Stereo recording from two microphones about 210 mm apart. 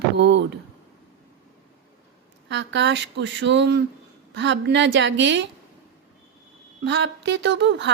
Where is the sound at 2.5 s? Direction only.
60° right (ahead or behind).